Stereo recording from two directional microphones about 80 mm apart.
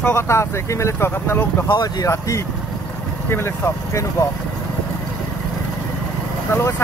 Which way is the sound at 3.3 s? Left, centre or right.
Left.